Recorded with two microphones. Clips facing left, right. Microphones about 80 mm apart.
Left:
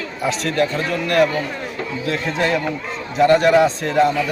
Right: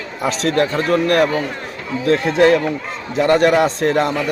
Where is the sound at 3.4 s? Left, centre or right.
Right.